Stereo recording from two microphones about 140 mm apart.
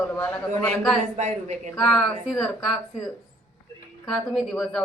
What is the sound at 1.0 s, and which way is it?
Speech, 55° right (ahead or behind).